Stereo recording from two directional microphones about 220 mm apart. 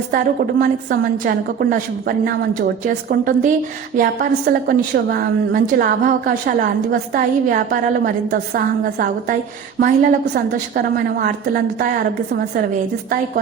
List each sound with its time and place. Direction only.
0.6 s a woman's voice: 40° right (ahead or behind)